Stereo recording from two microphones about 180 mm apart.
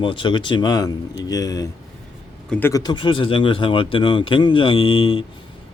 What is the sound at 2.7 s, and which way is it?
Speech, 20° left (ahead or behind).